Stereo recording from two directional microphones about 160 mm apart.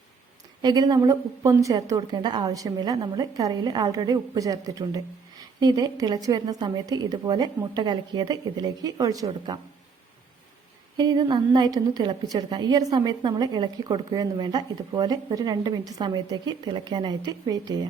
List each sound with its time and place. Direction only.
0.6 s a woman's voice: 25° right (ahead or behind)
10.9 s a woman's voice: 25° right (ahead or behind)